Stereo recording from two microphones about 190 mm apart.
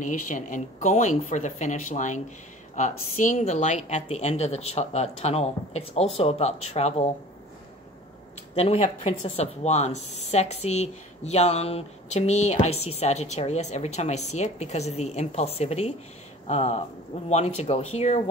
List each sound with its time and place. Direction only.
0.0 s speech: 45° left (ahead or behind)
8.5 s speech: 35° left (ahead or behind)